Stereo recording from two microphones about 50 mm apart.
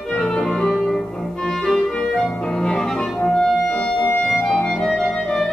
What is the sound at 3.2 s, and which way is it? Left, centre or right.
Clarinet, centre.